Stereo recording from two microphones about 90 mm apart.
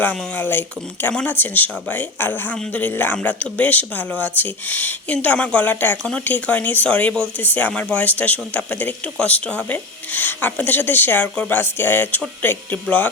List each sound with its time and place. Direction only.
0.3 s speech: 20° left (ahead or behind)
6.0 s speech: 5° left (ahead or behind)
6.2 s speech: 20° left (ahead or behind)